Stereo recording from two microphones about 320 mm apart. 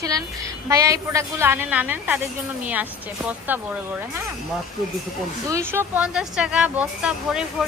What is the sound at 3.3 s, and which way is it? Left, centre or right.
Speech, centre.